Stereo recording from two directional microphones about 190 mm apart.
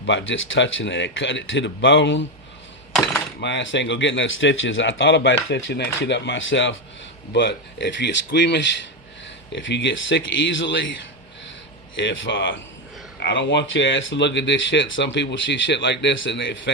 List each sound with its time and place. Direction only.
0.0 s speech: 75° left (ahead or behind)
3.4 s speech: 75° left (ahead or behind)
7.3 s speech: 65° left (ahead or behind)